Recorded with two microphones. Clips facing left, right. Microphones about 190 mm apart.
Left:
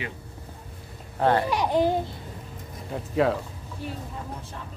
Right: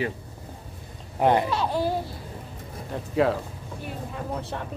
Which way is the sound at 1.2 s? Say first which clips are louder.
Right 1 dB; 15° right (ahead or behind).